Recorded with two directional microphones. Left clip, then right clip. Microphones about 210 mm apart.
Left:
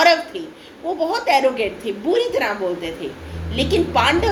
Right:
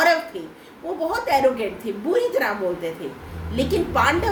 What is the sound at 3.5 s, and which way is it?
Speech, 25° right (ahead or behind).